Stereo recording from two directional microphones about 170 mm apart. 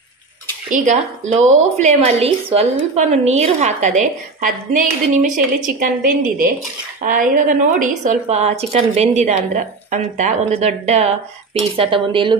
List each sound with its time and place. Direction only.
0.7 s a woman's voice: 45° right (ahead or behind); by 12.4 s 30° right (ahead or behind)